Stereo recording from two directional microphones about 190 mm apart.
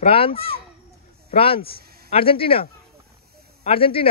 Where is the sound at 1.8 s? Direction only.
55° right (ahead or behind).